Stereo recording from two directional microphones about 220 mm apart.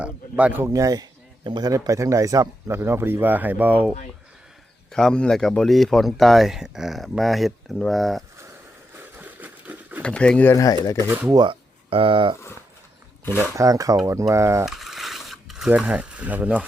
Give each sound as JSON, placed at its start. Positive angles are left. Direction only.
{"t": 0.0, "sound": "speech", "side_deg": -5}
{"t": 4.9, "sound": "speech", "side_deg": 5}
{"t": 9.0, "sound": "a sound", "side_deg": -10}
{"t": 10.0, "sound": "speech", "side_deg": 5}
{"t": 11.1, "sound": "speech", "side_deg": -10}
{"t": 11.3, "sound": "speech", "side_deg": -25}
{"t": 13.4, "sound": "speech", "side_deg": -15}
{"t": 14.6, "sound": "a sound", "side_deg": 0}